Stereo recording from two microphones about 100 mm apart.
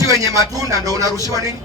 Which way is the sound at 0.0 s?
35° right (ahead or behind).